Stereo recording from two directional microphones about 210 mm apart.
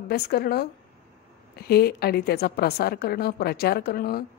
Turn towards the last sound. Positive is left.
turn(degrees=45)  # may be behind; listen again after turning